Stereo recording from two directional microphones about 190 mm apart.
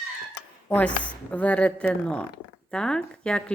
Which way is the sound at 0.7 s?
5° left (ahead or behind).